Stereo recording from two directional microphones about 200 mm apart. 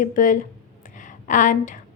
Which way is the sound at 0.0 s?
40° left (ahead or behind).